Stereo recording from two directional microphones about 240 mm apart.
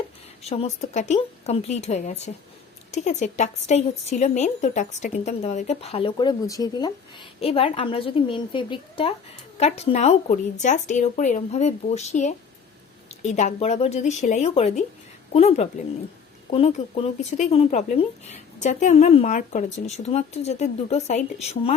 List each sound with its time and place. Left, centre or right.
0.4 s speech: left